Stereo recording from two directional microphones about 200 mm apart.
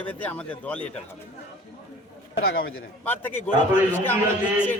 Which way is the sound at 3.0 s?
10° left (ahead or behind).